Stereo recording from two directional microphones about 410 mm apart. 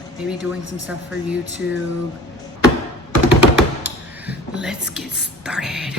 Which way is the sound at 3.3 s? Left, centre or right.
Centre.